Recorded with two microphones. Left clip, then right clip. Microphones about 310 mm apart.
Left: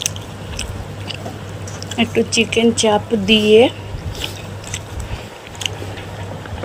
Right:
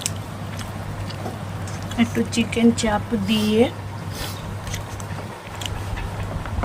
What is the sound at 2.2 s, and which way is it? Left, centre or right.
Speech, centre.